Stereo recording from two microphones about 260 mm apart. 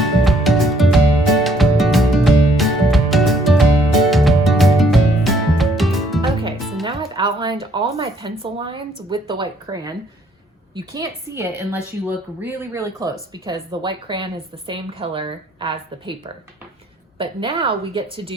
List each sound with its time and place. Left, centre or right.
0.0 s music: centre
6.8 s music: centre
10.9 s a woman's voice: centre